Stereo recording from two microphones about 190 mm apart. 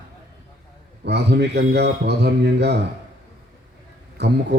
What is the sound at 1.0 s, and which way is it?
A man's voice, 65° right (ahead or behind).